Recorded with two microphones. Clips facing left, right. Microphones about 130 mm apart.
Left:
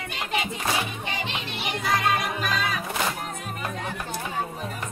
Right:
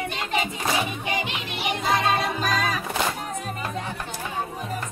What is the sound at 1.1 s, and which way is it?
Music, 15° right (ahead or behind).